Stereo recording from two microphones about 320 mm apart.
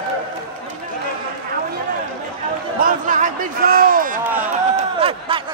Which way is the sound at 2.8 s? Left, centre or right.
Right.